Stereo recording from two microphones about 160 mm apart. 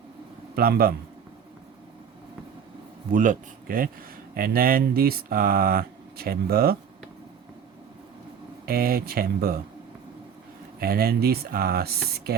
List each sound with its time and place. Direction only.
0.5 s speech: 70° right (ahead or behind)
3.1 s speech: 55° right (ahead or behind); by 6.7 s 75° right (ahead or behind)
8.6 s speech: 70° right (ahead or behind)
10.8 s speech: 70° right (ahead or behind)